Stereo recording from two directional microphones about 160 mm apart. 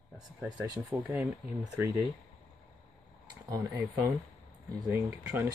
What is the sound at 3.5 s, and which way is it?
Speech, 15° right (ahead or behind).